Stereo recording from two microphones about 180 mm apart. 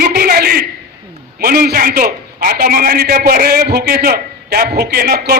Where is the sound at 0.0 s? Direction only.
55° right (ahead or behind).